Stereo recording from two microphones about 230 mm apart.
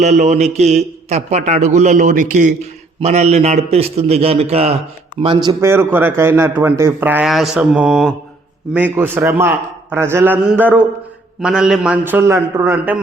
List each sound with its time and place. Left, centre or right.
0.0 s a man's voice: right; by 13.0 s centre